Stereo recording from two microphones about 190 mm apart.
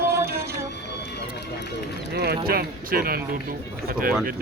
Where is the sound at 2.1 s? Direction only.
55° right (ahead or behind).